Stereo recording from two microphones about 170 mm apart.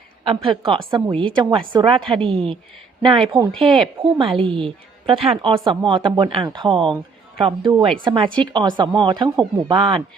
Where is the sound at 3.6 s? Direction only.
30° right (ahead or behind).